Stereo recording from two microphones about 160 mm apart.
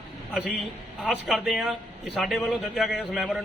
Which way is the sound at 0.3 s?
Centre (ahead or behind).